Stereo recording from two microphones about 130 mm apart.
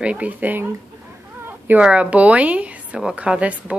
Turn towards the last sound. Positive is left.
turn(degrees=-10)  # may be behind; listen again after turning